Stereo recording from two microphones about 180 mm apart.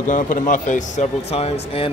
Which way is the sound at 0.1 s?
45° left (ahead or behind).